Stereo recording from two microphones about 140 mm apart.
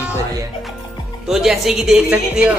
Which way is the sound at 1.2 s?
5° right (ahead or behind).